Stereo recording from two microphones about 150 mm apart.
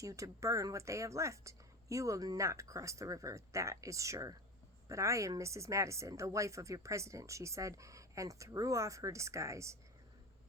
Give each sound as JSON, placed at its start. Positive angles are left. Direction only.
{"t": 0.0, "sound": "a woman's voice", "side_deg": -20}